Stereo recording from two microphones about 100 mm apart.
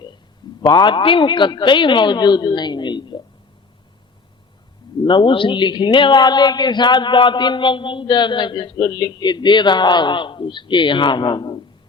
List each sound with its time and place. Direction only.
0.6 s a man's voice: 50° left (ahead or behind)
5.0 s a man's voice: 55° left (ahead or behind)